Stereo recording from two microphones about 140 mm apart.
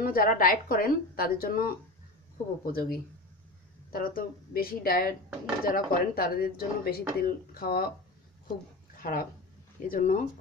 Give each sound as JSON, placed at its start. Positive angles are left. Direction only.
{"t": 0.0, "sound": "a woman's voice", "side_deg": 90}
{"t": 8.9, "sound": "a sound", "side_deg": 90}
{"t": 9.8, "sound": "speech", "side_deg": 70}